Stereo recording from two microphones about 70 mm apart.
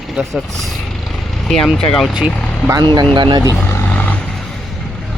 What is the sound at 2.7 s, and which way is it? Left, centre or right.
Speech, right.